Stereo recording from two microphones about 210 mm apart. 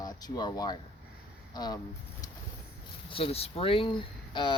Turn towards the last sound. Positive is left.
turn(degrees=20)  # may be behind; listen again after turning